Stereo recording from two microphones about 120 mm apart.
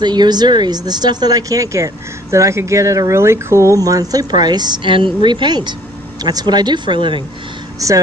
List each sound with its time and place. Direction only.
0.0 s speech: 35° right (ahead or behind)
7.8 s speech: 30° right (ahead or behind)